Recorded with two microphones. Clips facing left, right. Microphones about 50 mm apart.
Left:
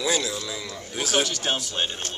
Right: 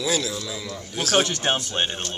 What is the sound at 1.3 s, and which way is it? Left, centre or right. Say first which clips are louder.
Speech: right 3 dB; right.